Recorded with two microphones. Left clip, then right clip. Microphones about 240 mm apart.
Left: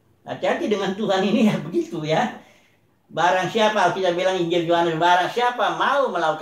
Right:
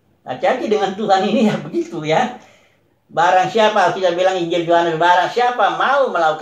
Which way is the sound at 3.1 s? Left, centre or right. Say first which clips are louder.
Right 6 dB; centre.